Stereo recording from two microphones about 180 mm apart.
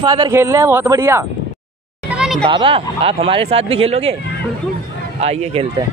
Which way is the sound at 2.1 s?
Centre (ahead or behind).